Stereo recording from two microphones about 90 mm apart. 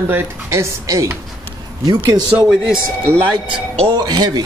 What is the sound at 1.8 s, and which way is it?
Speech, 55° right (ahead or behind).